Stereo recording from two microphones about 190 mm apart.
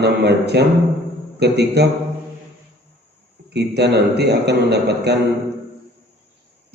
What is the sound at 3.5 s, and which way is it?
A man's voice, 60° right (ahead or behind).